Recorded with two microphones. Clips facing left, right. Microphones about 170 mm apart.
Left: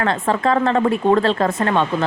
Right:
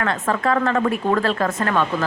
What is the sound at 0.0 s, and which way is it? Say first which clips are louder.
Speech: left 3 dB; 30° left (ahead or behind).